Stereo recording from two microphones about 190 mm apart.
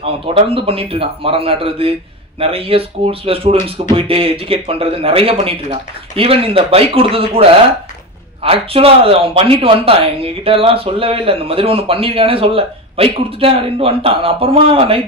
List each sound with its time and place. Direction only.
0.0 s a man's voice: 30° right (ahead or behind)